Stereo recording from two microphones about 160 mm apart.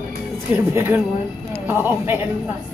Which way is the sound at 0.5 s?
15° right (ahead or behind).